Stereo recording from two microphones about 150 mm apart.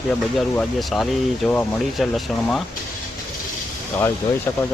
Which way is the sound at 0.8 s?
Centre (ahead or behind).